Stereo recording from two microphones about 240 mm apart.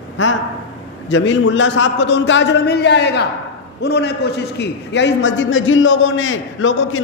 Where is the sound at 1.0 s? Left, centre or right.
Left.